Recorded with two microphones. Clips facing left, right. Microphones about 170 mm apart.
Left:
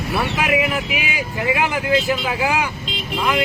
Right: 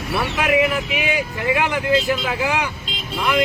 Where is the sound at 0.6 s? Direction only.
45° right (ahead or behind).